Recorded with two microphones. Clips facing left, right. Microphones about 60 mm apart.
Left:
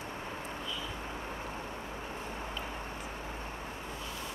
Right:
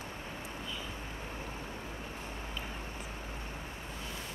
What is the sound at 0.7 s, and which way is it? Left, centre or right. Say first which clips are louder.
Vehicle: left 2 dB; right.